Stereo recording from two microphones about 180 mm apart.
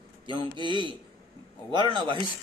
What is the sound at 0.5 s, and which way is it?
Speech, 25° right (ahead or behind).